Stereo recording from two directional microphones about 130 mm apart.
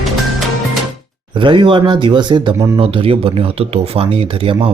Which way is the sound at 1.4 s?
40° right (ahead or behind).